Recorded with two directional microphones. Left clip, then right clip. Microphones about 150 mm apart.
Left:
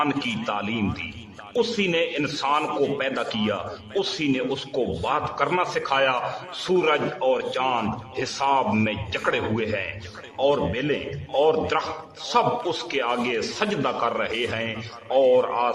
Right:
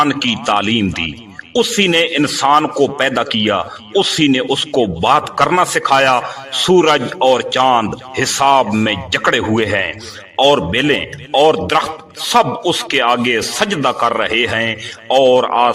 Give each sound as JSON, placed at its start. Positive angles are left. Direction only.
{"t": 0.1, "sound": "a man's voice", "side_deg": -35}